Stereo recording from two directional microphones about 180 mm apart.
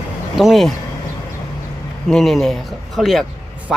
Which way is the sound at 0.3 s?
Centre (ahead or behind).